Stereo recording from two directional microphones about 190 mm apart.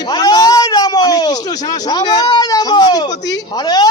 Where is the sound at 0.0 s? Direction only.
20° left (ahead or behind).